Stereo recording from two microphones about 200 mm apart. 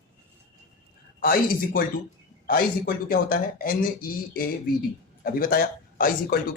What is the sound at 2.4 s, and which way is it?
A man's voice, 45° left (ahead or behind).